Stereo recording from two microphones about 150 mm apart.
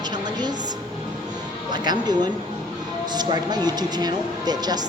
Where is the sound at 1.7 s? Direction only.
30° right (ahead or behind).